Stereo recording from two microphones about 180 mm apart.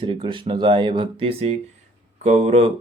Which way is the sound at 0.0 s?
25° right (ahead or behind).